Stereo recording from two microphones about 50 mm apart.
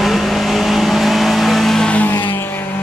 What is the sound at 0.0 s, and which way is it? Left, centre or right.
Vehicle, centre.